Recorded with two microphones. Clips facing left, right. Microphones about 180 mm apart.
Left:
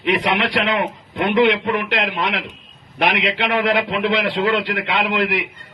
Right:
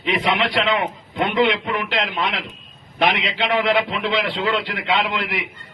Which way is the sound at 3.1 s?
60° left (ahead or behind).